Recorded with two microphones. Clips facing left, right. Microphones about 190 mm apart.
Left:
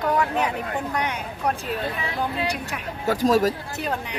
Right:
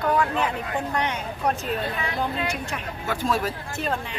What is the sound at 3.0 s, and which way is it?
Speech, 40° left (ahead or behind).